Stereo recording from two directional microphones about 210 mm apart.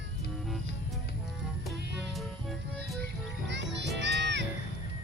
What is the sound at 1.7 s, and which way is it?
Music, 55° right (ahead or behind).